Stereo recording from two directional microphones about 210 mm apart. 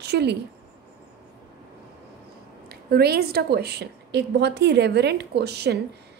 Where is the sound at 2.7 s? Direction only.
50° right (ahead or behind).